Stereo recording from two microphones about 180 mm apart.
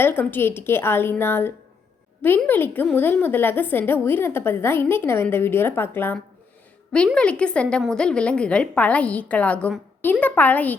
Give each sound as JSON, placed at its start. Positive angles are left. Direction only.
{"t": 0.0, "sound": "a woman's voice", "side_deg": 10}